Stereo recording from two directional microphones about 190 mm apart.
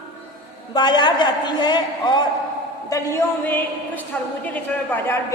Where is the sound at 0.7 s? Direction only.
20° left (ahead or behind).